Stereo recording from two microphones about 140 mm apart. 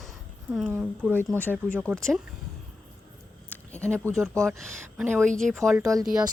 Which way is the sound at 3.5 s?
10° left (ahead or behind).